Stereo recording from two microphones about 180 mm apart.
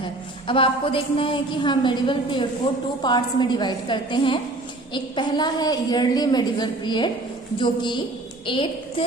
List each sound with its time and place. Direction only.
0.4 s a woman's voice: 30° left (ahead or behind)